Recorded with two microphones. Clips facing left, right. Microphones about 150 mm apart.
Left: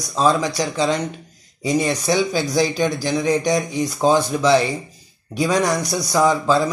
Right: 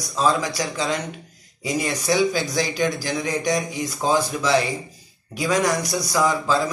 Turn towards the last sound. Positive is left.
turn(degrees=25)  # may be behind; listen again after turning